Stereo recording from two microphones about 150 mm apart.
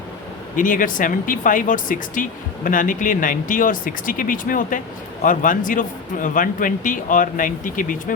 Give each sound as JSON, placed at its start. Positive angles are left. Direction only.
{"t": 0.5, "sound": "speech", "side_deg": 65}